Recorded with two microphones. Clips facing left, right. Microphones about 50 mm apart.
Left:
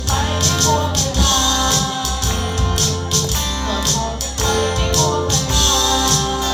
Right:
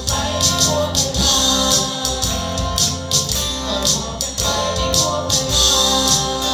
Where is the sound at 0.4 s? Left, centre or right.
Left.